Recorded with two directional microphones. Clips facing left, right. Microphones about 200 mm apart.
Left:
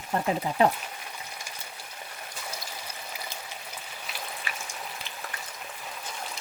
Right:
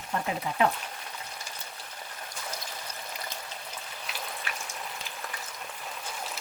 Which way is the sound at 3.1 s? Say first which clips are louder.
Even; 10° left (ahead or behind).